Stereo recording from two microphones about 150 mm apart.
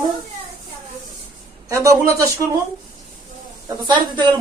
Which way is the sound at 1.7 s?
20° right (ahead or behind).